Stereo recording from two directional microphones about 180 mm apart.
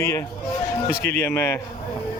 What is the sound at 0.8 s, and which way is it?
Speech, 60° left (ahead or behind).